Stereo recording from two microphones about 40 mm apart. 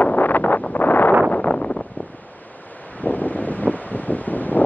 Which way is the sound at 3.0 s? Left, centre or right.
Left.